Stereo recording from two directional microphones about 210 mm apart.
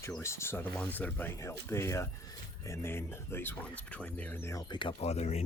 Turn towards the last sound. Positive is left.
turn(degrees=30)  # may be behind; listen again after turning